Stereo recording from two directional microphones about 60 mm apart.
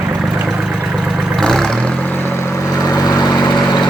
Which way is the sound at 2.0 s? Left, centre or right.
Left.